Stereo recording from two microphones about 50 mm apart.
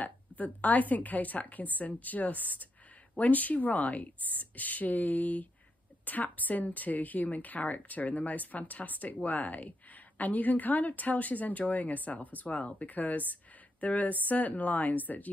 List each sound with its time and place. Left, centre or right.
0.0 s a woman's voice: left
13.3 s a sound: left
14.2 s a woman's voice: left